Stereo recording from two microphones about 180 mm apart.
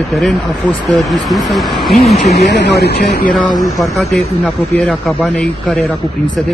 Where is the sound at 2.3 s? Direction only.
70° left (ahead or behind).